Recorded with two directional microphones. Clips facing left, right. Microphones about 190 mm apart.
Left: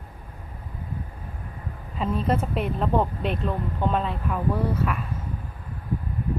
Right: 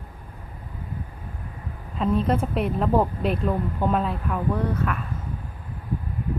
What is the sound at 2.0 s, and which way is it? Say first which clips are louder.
Speech: right 2 dB; 5° left (ahead or behind).